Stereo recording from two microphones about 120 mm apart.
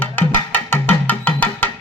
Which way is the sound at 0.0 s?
15° left (ahead or behind).